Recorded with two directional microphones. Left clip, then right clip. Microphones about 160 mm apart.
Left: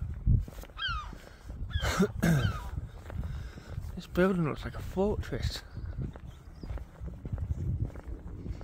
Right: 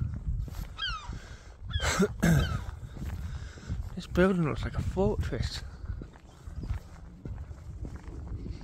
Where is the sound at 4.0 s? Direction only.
15° right (ahead or behind).